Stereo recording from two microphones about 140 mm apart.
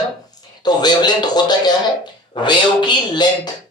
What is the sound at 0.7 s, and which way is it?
Speech, 30° left (ahead or behind).